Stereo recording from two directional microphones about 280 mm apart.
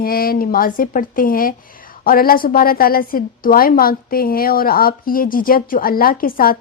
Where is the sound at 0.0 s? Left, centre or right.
Left.